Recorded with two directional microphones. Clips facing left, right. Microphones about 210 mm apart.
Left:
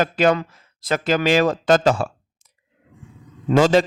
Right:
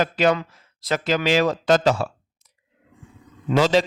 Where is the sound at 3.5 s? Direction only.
50° left (ahead or behind).